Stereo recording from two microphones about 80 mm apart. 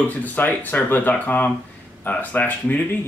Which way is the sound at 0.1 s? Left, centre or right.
Left.